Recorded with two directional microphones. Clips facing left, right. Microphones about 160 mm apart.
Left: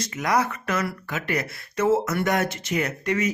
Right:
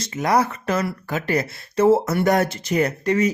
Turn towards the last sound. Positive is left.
turn(degrees=-35)  # may be behind; listen again after turning